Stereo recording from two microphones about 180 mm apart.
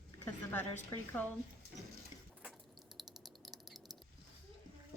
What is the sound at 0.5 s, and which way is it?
Speech, 10° left (ahead or behind).